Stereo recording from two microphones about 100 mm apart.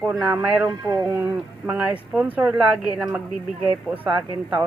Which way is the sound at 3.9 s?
15° right (ahead or behind).